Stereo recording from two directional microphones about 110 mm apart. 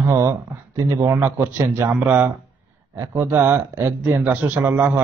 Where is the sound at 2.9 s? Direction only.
30° right (ahead or behind).